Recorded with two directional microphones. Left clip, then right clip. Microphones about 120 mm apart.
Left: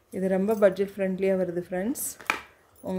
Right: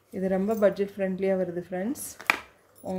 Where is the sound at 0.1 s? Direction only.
25° left (ahead or behind).